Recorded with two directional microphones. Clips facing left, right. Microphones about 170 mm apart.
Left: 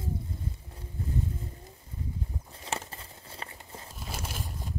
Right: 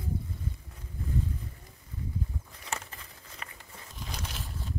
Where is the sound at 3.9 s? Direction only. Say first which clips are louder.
Left 1 dB; 5° left (ahead or behind).